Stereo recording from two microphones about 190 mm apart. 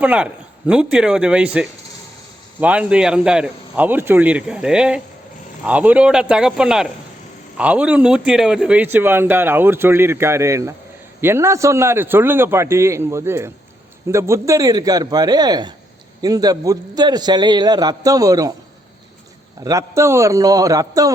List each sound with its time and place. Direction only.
0.0 s a man's voice: 5° right (ahead or behind)
19.6 s a man's voice: 15° right (ahead or behind)